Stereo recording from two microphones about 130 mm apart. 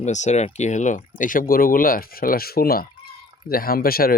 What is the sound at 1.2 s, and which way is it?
Speech, 90° left.